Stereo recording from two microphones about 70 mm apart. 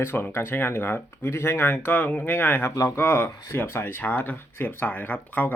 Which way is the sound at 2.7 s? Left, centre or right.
Left.